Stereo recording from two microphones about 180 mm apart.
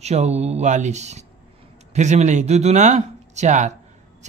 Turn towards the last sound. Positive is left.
turn(degrees=-40)  # may be behind; listen again after turning